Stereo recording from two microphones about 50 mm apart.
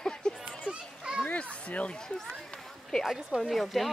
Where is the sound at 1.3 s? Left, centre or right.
Left.